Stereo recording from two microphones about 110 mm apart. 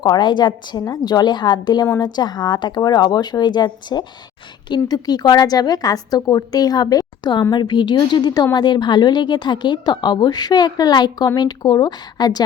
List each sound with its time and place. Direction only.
0.0 s a woman's voice: 45° left (ahead or behind)